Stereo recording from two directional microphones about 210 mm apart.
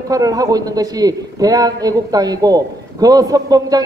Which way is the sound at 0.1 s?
15° right (ahead or behind).